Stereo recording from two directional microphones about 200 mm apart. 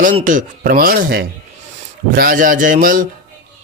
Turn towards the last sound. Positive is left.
turn(degrees=-40)  # may be behind; listen again after turning